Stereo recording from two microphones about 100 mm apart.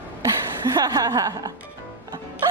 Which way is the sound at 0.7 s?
40° right (ahead or behind).